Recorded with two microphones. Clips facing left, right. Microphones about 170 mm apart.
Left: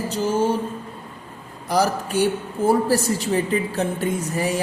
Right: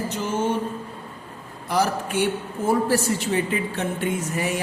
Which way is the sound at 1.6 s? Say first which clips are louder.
Left 2 dB; 40° left (ahead or behind).